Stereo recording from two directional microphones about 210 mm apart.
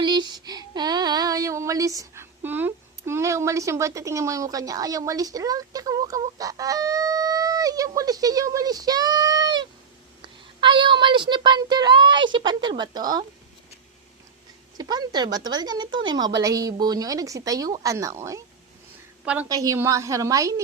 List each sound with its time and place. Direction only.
0.0 s child singing: 20° right (ahead or behind)
10.6 s speech: 20° right (ahead or behind)
14.8 s a woman's voice: 20° right (ahead or behind)
19.5 s speech: 15° right (ahead or behind)